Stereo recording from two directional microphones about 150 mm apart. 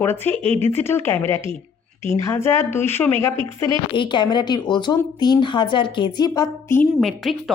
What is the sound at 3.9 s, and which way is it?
A woman's voice, 30° left (ahead or behind).